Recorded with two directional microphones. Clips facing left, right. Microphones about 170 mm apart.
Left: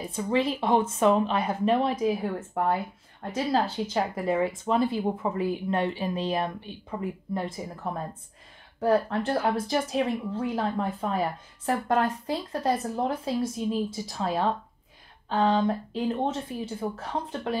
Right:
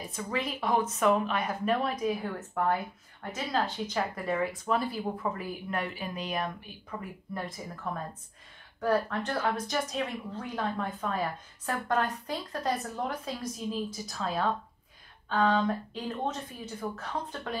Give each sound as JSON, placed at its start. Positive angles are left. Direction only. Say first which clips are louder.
{"t": 0.1, "sound": "a woman's voice", "louder": "left 8 dB", "side_deg": 30}